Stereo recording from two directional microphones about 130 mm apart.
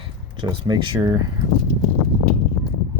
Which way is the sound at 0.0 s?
40° right (ahead or behind).